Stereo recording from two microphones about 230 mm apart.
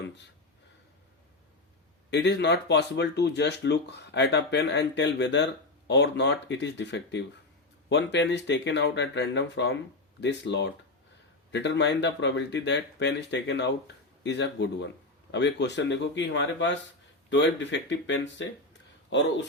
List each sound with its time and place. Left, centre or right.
2.0 s speech: left